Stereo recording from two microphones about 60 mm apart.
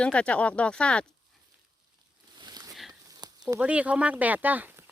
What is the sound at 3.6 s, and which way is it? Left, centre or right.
Speech, right.